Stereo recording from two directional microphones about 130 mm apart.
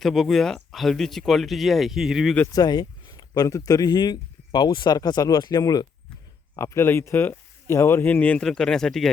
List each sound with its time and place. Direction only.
0.0 s speech: centre (ahead or behind)
2.5 s speech: 30° left (ahead or behind); by 9.0 s 5° left (ahead or behind)